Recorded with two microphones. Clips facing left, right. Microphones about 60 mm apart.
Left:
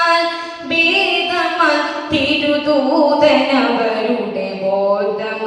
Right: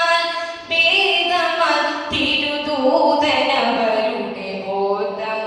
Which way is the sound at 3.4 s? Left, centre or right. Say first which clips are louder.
Left 3 dB; left.